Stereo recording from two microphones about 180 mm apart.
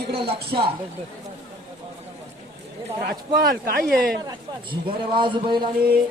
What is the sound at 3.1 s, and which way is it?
Speech, 55° right (ahead or behind).